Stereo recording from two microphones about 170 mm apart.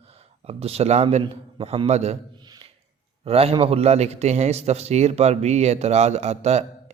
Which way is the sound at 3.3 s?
35° right (ahead or behind).